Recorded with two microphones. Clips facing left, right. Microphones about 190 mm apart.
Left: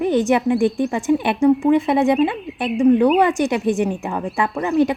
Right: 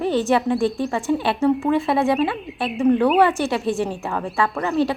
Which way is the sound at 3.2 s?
15° left (ahead or behind).